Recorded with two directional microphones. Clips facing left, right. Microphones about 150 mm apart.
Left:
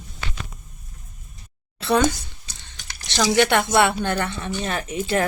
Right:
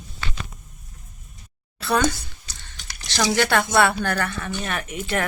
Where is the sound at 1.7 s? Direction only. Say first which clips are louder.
Left 2 dB; 25° left (ahead or behind).